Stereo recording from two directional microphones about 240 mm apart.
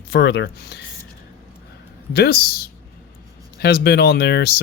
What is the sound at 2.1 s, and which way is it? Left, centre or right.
Speech, left.